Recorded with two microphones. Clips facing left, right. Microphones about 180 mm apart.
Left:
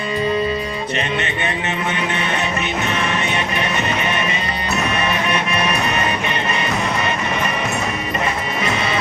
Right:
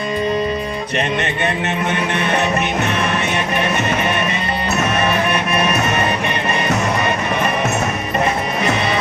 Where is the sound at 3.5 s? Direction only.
50° right (ahead or behind).